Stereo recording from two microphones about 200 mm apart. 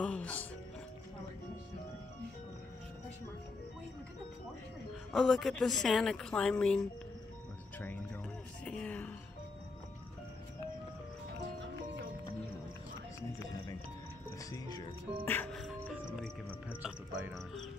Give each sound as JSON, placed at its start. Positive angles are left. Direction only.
{"t": 0.0, "sound": "speech", "side_deg": 5}
{"t": 5.1, "sound": "a woman's voice", "side_deg": 0}
{"t": 8.6, "sound": "music", "side_deg": 5}
{"t": 14.5, "sound": "speech", "side_deg": 20}
{"t": 15.2, "sound": "music", "side_deg": 10}